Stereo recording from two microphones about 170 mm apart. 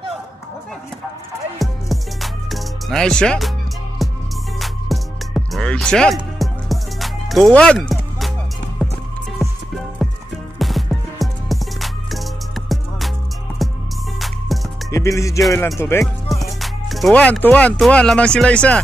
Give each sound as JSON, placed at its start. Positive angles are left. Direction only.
{"t": 1.6, "sound": "music", "side_deg": 0}
{"t": 10.0, "sound": "music", "side_deg": 0}
{"t": 14.9, "sound": "music", "side_deg": 20}
{"t": 15.8, "sound": "speech", "side_deg": 15}
{"t": 16.3, "sound": "speech", "side_deg": 0}